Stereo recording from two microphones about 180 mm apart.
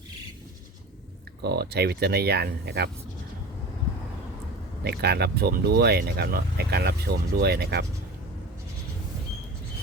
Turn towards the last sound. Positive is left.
turn(degrees=-65)  # may be behind; listen again after turning